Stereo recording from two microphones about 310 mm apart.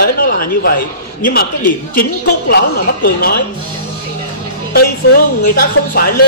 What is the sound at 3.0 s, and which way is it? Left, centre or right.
Speech, left.